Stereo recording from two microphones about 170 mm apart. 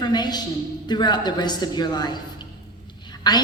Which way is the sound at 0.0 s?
25° left (ahead or behind).